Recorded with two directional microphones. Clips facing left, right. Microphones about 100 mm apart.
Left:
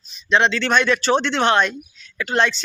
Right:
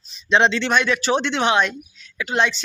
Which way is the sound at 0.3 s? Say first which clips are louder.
Right 1 dB; 25° right (ahead or behind).